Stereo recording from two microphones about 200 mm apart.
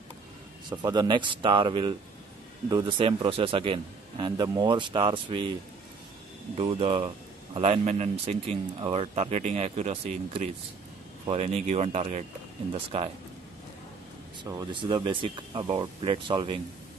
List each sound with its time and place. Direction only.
0.7 s a man's voice: 20° right (ahead or behind)
6.6 s a man's voice: 30° right (ahead or behind)
14.4 s a man's voice: 20° right (ahead or behind)